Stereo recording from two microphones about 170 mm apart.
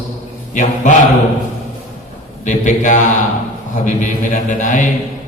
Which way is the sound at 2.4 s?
45° left (ahead or behind).